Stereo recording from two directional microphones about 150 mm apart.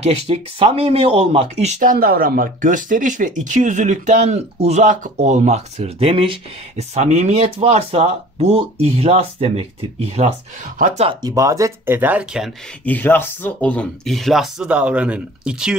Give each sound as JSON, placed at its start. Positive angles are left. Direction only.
{"t": 0.0, "sound": "speech", "side_deg": -40}
{"t": 11.1, "sound": "speech", "side_deg": -25}
{"t": 12.8, "sound": "speech", "side_deg": 10}